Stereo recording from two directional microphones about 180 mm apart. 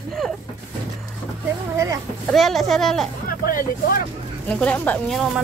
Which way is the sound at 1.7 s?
15° right (ahead or behind).